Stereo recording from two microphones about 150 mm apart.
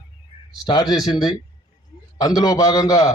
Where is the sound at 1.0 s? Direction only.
25° left (ahead or behind).